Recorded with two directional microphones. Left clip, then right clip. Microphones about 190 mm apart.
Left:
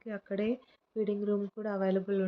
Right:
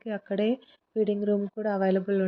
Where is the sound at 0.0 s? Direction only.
25° right (ahead or behind).